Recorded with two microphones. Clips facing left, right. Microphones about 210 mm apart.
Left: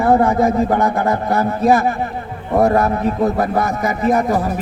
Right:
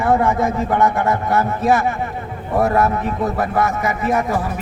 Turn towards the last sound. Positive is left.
turn(degrees=35)  # may be behind; listen again after turning